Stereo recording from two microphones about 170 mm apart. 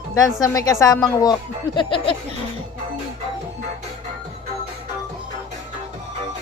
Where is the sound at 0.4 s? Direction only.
20° left (ahead or behind).